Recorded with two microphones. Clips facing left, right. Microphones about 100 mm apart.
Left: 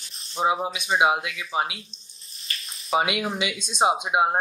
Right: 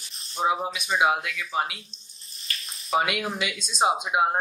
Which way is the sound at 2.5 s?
Centre (ahead or behind).